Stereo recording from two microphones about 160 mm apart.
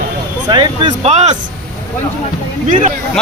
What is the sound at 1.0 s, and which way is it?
Speech, 40° right (ahead or behind).